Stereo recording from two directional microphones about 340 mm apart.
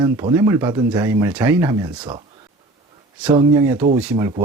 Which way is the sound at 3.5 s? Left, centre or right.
Centre.